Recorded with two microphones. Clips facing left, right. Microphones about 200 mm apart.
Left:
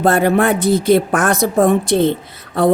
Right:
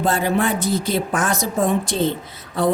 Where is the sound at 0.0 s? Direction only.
60° left (ahead or behind).